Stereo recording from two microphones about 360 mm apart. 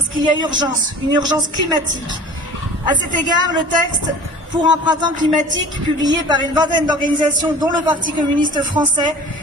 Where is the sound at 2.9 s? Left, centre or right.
Right.